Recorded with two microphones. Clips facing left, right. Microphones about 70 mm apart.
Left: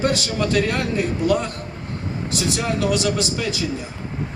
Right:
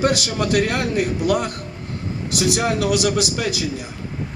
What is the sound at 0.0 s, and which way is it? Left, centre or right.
A man's voice, right.